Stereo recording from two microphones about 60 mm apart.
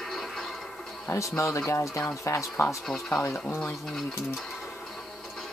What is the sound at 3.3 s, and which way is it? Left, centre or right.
Speech, left.